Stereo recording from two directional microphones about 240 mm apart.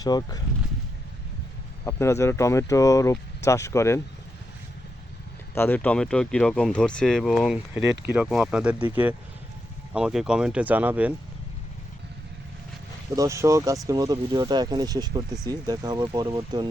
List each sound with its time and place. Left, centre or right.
0.0 s speech: centre
1.8 s speech: centre
5.5 s speech: centre
9.9 s speech: centre
13.1 s speech: centre